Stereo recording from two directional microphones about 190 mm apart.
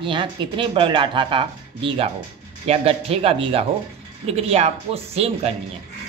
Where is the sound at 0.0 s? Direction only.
25° right (ahead or behind).